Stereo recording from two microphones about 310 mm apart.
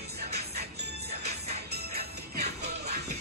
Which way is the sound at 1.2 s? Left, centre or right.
Right.